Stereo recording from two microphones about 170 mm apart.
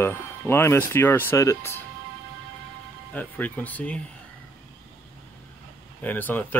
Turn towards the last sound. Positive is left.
turn(degrees=10)  # may be behind; listen again after turning